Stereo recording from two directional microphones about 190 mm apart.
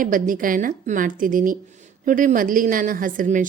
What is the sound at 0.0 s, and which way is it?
A woman's voice, 45° right (ahead or behind).